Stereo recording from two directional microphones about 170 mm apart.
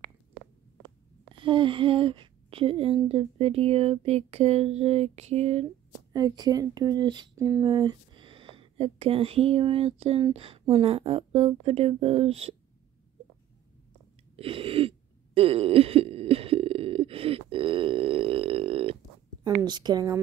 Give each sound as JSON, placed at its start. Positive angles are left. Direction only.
{"t": 1.3, "sound": "speech", "side_deg": -30}
{"t": 6.1, "sound": "speech", "side_deg": -25}
{"t": 14.3, "sound": "a sound", "side_deg": -35}
{"t": 19.6, "sound": "speech", "side_deg": -25}